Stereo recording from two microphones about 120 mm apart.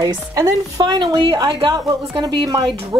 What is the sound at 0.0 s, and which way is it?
Speech, 30° right (ahead or behind).